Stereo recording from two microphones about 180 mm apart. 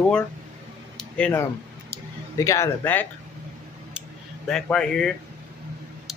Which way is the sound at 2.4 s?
15° left (ahead or behind).